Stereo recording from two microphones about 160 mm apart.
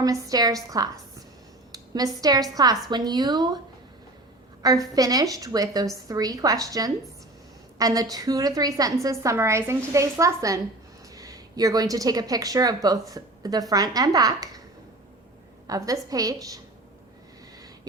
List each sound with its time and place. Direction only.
0.0 s a woman's voice: 25° right (ahead or behind)
4.6 s a woman's voice: 20° right (ahead or behind)
15.6 s a woman's voice: 20° right (ahead or behind)